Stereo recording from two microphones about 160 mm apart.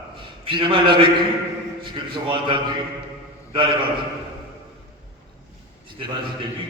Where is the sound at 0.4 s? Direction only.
30° right (ahead or behind).